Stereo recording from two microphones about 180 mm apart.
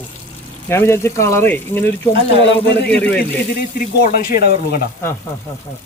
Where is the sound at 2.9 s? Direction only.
10° left (ahead or behind).